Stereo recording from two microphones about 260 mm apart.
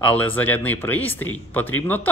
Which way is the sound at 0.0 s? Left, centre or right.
Centre.